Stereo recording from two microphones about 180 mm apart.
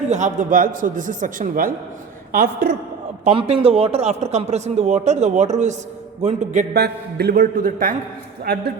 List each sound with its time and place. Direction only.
0.1 s a man's voice: 45° right (ahead or behind)
3.2 s a man's voice: 35° right (ahead or behind)
6.7 s a man's voice: 65° right (ahead or behind)